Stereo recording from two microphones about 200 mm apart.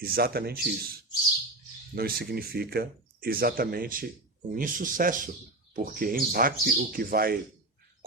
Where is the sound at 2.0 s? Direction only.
50° right (ahead or behind).